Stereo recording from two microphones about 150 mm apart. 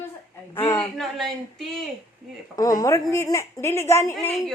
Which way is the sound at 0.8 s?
Centre (ahead or behind).